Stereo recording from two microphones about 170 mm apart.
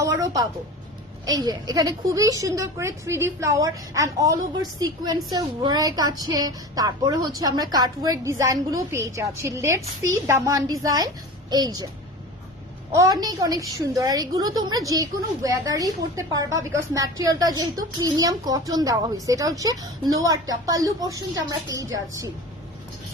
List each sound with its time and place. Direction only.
0.0 s a sound: 20° right (ahead or behind)
1.2 s a woman's voice: 20° right (ahead or behind)
12.9 s a woman's voice: 20° right (ahead or behind)